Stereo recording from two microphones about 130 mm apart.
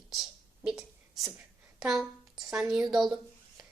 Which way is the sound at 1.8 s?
Centre (ahead or behind).